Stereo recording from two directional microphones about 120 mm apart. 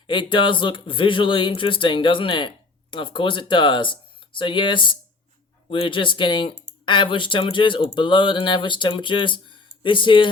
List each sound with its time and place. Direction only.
0.1 s speech: 40° left (ahead or behind)